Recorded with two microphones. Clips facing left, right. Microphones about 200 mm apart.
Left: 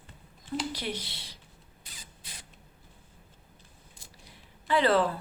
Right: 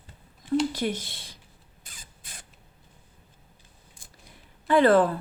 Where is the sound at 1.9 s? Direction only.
50° right (ahead or behind).